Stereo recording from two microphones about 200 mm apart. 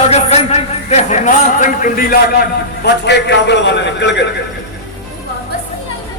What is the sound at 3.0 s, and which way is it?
A man's voice, 60° left (ahead or behind).